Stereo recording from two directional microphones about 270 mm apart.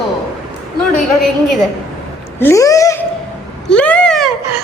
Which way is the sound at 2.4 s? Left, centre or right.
Centre.